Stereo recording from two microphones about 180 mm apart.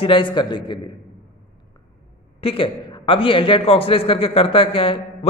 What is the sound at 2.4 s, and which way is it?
A man's voice, 30° left (ahead or behind).